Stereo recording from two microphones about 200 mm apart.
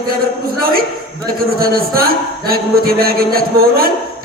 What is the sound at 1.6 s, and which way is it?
Speech, 50° right (ahead or behind).